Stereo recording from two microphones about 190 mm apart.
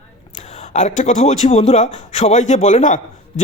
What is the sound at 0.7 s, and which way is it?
Speech, 35° left (ahead or behind).